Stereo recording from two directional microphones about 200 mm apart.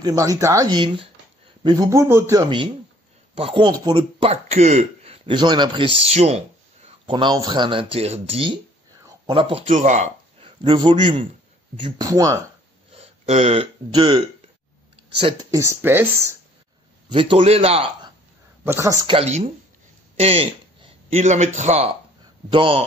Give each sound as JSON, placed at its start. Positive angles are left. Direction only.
{"t": 0.0, "sound": "a man's voice", "side_deg": -15}
{"t": 9.0, "sound": "a sound", "side_deg": -20}
{"t": 9.7, "sound": "a man's voice", "side_deg": -35}
{"t": 12.9, "sound": "speech", "side_deg": -30}
{"t": 17.1, "sound": "a man's voice", "side_deg": -25}
{"t": 18.6, "sound": "speech", "side_deg": -15}
{"t": 19.1, "sound": "a woman's voice", "side_deg": -30}